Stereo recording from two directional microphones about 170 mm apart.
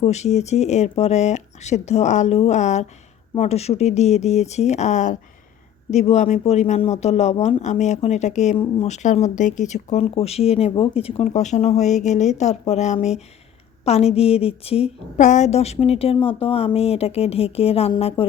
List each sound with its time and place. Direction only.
0.0 s speech: 40° left (ahead or behind)